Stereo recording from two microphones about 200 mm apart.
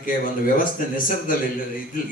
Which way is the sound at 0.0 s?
45° left (ahead or behind).